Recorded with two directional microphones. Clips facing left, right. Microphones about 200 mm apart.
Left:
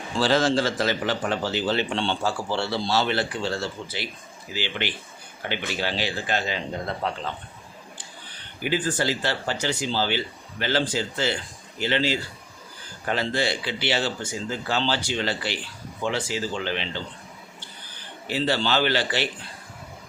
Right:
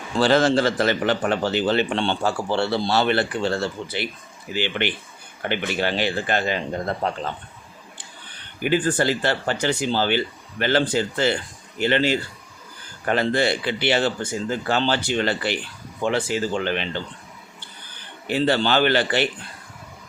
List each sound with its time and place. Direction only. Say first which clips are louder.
0.2 s a man's voice: right 4 dB; 60° right (ahead or behind)
8.6 s a man's voice: right 5 dB; 55° right (ahead or behind)
18.3 s a man's voice: right 4 dB; 55° right (ahead or behind)